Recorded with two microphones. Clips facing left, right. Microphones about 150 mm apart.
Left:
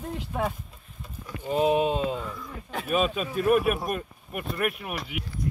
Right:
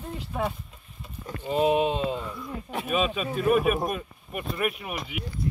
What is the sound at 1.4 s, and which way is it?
Speech, 10° right (ahead or behind).